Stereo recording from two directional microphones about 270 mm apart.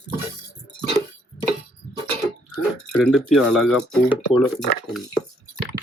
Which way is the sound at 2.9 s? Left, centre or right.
Centre.